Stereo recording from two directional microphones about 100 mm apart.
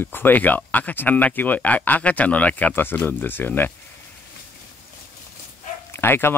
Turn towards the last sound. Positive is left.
turn(degrees=20)  # may be behind; listen again after turning